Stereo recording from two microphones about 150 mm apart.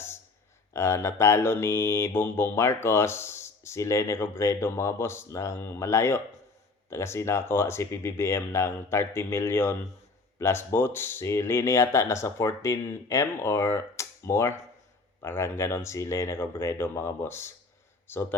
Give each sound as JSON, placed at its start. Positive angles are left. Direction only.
{"t": 0.7, "sound": "mantra", "side_deg": 20}
{"t": 10.3, "sound": "speech", "side_deg": 15}
{"t": 15.2, "sound": "mantra", "side_deg": 15}